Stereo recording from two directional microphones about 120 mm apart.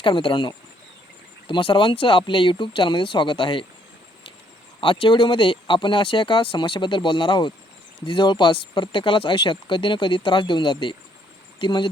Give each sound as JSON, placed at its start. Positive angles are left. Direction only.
{"t": 0.0, "sound": "speech", "side_deg": 45}
{"t": 4.8, "sound": "speech", "side_deg": 45}